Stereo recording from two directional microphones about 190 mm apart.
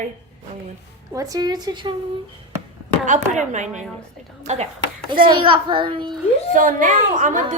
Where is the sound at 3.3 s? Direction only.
40° right (ahead or behind).